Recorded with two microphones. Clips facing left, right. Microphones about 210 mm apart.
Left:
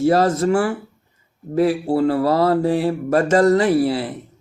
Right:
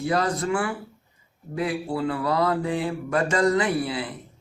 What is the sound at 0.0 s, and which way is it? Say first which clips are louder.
Speech: left 8 dB; 45° left (ahead or behind).